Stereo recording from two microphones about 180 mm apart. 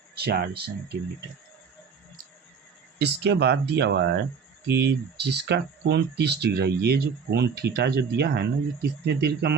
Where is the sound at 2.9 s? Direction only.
70° right (ahead or behind).